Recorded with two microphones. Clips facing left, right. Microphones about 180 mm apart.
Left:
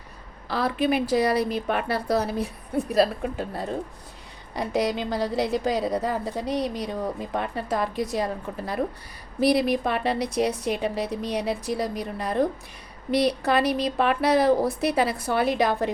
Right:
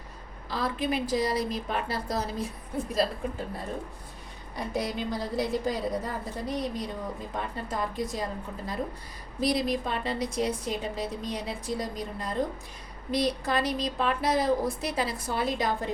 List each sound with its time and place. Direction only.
0.4 s a woman's voice: 65° left (ahead or behind)